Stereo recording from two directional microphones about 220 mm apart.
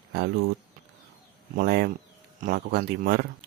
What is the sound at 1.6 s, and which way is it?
A man's voice, 45° right (ahead or behind).